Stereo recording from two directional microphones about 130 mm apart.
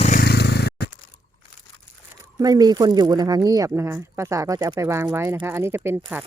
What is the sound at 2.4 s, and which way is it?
Speech, 30° right (ahead or behind).